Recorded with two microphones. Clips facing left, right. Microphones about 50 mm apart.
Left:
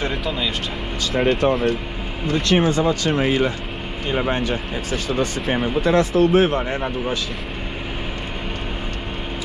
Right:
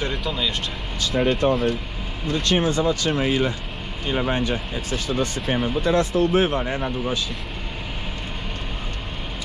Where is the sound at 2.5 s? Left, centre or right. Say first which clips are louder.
Left 3 dB; left.